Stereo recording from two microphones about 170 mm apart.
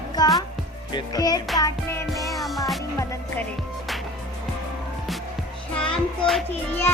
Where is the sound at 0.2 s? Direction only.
25° left (ahead or behind).